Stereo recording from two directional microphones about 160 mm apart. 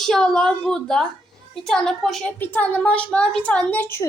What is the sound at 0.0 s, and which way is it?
A woman's voice, 5° left (ahead or behind).